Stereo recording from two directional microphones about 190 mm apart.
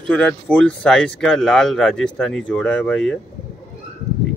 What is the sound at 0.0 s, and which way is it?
Speech, 5° left (ahead or behind).